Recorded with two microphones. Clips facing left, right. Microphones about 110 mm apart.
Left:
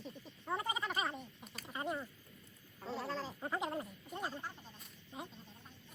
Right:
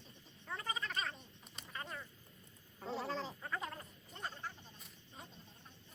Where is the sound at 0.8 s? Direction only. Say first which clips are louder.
Left 4 dB; 15° left (ahead or behind).